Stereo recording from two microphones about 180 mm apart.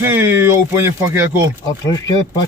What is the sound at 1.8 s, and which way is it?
Speech, 20° left (ahead or behind).